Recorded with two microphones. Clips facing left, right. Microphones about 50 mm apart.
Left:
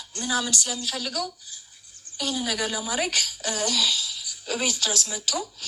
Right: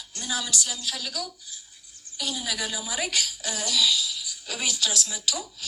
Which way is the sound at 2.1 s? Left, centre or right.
Left.